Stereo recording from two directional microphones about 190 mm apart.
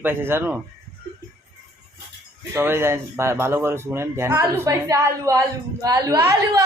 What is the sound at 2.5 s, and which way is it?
Speech, 15° right (ahead or behind).